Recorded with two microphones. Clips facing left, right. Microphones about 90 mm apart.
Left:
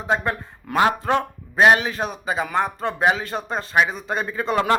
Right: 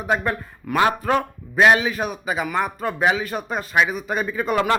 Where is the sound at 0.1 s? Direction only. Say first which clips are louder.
Even; 25° left (ahead or behind).